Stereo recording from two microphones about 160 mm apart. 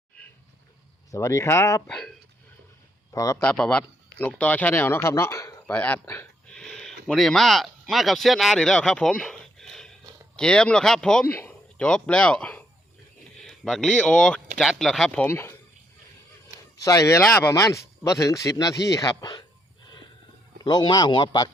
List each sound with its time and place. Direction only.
1.1 s speech: 20° left (ahead or behind)
1.9 s speech: 5° left (ahead or behind)
3.1 s speech: 20° left (ahead or behind)
3.4 s speech: 5° left (ahead or behind)
16.7 s speech: 20° left (ahead or behind)
20.6 s speech: 25° left (ahead or behind)